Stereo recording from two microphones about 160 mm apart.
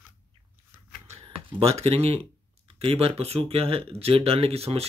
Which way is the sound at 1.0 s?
40° right (ahead or behind).